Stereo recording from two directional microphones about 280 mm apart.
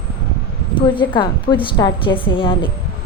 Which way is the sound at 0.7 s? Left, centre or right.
Centre.